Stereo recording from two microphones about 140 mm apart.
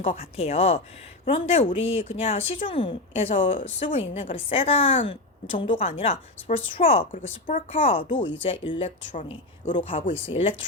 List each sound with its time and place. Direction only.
0.2 s a woman's voice: 45° left (ahead or behind)
7.1 s speech: 65° left (ahead or behind)
7.7 s a woman's voice: 40° left (ahead or behind)